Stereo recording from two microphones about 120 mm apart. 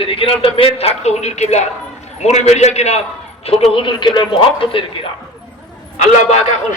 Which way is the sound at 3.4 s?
50° left (ahead or behind).